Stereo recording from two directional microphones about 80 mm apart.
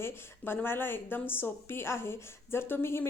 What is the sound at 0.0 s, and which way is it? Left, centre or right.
A woman's voice, left.